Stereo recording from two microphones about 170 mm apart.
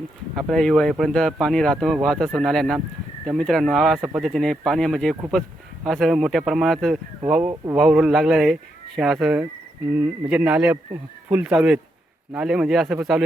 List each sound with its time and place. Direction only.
0.3 s speech: centre (ahead or behind)
7.5 s speech: 20° right (ahead or behind)
7.8 s speech: centre (ahead or behind)